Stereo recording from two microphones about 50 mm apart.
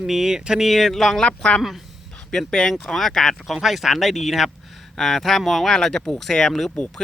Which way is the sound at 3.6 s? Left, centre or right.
Centre.